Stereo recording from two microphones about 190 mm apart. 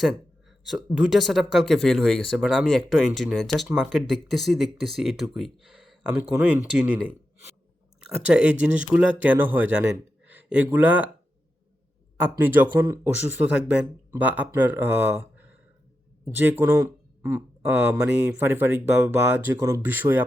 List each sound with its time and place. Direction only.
0.9 s speech: centre (ahead or behind)
8.0 s speech: 5° right (ahead or behind)
12.2 s speech: 10° right (ahead or behind)